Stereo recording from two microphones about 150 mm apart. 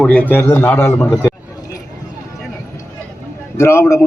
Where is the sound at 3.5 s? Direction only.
20° left (ahead or behind).